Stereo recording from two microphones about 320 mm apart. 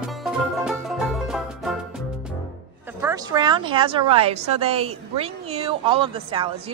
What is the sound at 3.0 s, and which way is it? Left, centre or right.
A woman's voice, centre.